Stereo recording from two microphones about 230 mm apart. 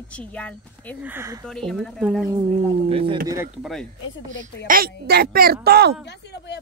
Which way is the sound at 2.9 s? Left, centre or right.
Right.